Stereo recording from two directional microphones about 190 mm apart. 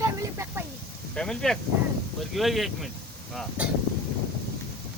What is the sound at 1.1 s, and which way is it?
Speech, 5° left (ahead or behind).